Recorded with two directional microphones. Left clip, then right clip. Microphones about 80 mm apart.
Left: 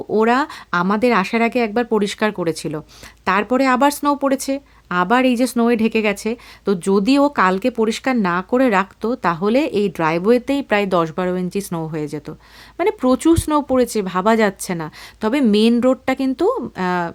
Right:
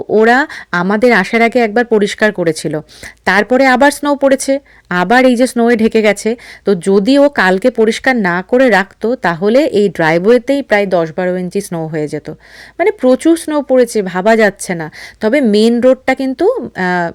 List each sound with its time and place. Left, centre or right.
0.1 s speech: right
5.4 s speech: right
6.7 s speech: right
7.4 s speech: right
10.3 s speech: right
10.8 s speech: centre
11.2 s speech: centre
11.9 s speech: right
16.7 s speech: right